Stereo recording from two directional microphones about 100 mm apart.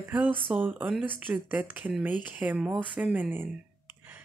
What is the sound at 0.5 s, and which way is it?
Speech, 10° right (ahead or behind).